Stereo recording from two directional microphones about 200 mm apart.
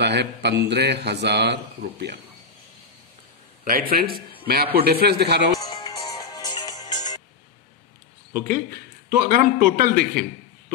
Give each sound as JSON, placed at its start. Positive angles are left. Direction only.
{"t": 0.0, "sound": "a man's voice", "side_deg": -55}
{"t": 3.6, "sound": "speech", "side_deg": -45}
{"t": 5.6, "sound": "music", "side_deg": 20}
{"t": 9.1, "sound": "speech", "side_deg": -45}